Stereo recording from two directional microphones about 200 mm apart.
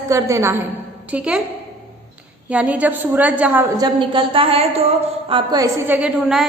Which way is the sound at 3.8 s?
25° right (ahead or behind).